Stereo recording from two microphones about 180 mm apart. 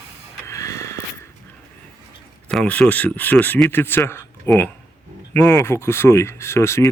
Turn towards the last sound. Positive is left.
turn(degrees=15)  # may be behind; listen again after turning